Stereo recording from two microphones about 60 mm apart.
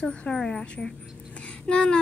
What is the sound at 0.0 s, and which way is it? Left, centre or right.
Speech, centre.